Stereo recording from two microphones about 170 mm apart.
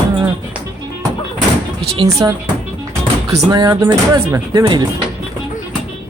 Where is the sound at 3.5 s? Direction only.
25° right (ahead or behind).